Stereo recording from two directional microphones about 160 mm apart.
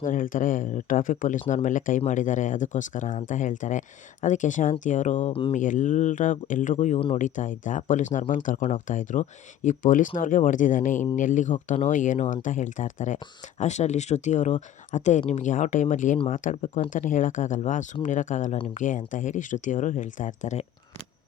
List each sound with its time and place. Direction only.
0.0 s speech: 55° left (ahead or behind)
5.3 s mantra: 35° left (ahead or behind)
5.5 s speech: 55° left (ahead or behind)